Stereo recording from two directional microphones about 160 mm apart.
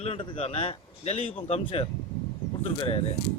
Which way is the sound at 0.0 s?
40° left (ahead or behind).